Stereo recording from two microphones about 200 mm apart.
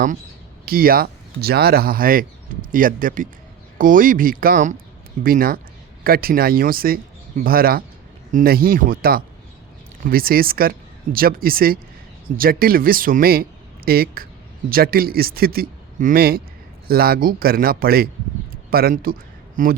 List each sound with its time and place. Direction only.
0.6 s speech: 50° right (ahead or behind)